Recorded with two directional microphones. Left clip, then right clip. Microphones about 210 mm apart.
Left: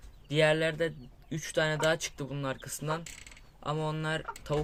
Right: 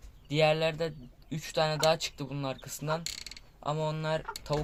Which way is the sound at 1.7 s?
15° left (ahead or behind).